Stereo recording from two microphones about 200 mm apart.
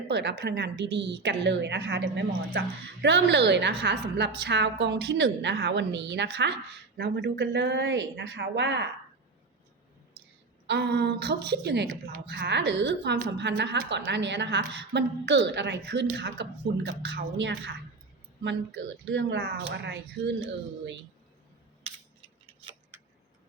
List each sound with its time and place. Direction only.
0.1 s a woman's voice: 60° right (ahead or behind)
10.7 s a woman's voice: 60° right (ahead or behind)
22.9 s tick-tock: 10° right (ahead or behind)